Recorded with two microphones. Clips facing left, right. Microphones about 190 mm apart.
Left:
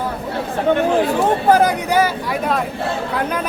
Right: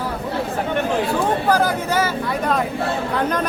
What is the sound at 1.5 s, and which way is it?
Speech, 20° left (ahead or behind).